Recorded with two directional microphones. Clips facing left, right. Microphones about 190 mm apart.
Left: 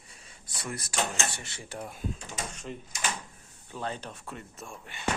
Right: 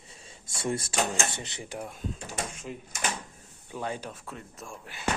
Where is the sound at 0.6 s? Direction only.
25° right (ahead or behind).